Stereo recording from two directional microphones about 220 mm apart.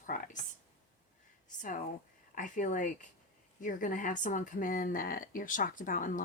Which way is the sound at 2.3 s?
35° left (ahead or behind).